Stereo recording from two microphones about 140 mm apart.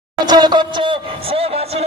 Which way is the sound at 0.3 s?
30° right (ahead or behind).